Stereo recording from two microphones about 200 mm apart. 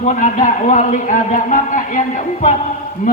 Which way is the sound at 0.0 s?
35° left (ahead or behind).